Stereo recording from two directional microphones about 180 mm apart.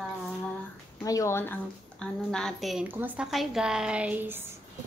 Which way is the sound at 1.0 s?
20° left (ahead or behind).